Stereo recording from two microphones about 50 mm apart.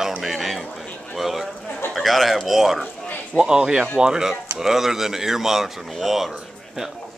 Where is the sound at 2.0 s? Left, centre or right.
Centre.